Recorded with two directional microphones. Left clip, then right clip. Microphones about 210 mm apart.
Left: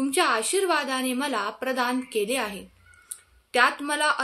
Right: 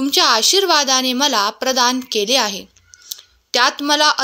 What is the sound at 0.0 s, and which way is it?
A woman's voice, 45° right (ahead or behind).